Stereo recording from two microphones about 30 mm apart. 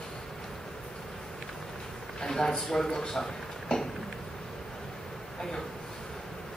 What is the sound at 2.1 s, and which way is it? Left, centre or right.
Speech, left.